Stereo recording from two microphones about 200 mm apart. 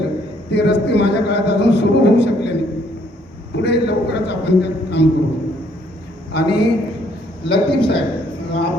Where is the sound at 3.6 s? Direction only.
55° left (ahead or behind).